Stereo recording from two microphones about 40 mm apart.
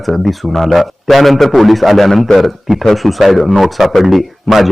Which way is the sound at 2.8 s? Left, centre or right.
Centre.